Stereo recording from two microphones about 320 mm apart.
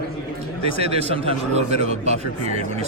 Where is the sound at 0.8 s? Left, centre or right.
Centre.